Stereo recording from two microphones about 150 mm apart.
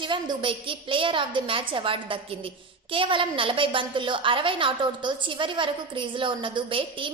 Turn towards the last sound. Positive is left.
turn(degrees=-35)  # may be behind; listen again after turning